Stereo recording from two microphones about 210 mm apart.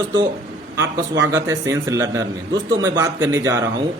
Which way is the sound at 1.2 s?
15° right (ahead or behind).